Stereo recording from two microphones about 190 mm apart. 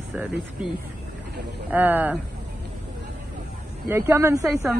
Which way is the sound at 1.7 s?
10° right (ahead or behind).